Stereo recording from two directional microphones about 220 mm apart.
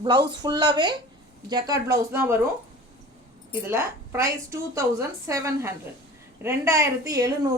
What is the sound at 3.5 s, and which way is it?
A woman's voice, 10° right (ahead or behind).